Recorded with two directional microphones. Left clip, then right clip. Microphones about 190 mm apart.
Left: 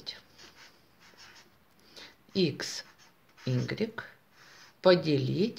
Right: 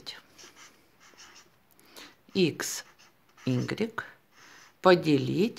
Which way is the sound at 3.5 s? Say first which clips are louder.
Right 2 dB; 30° right (ahead or behind).